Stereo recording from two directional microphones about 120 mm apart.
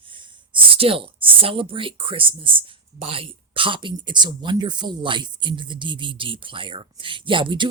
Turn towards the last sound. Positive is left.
turn(degrees=-45)  # may be behind; listen again after turning